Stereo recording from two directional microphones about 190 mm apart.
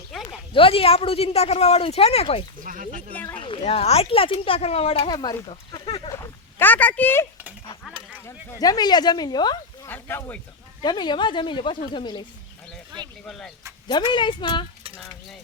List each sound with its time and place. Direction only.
0.3 s a woman's voice: 30° left (ahead or behind)
2.6 s speech: 45° right (ahead or behind)
3.1 s a sound: 10° left (ahead or behind)
3.3 s speech: 25° left (ahead or behind)
6.6 s a woman's voice: 10° left (ahead or behind)
9.9 s speech: 10° left (ahead or behind)
10.8 s speech: 25° left (ahead or behind)
13.2 s a sound: centre (ahead or behind)
13.8 s speech: 25° left (ahead or behind)
14.9 s a sound: centre (ahead or behind)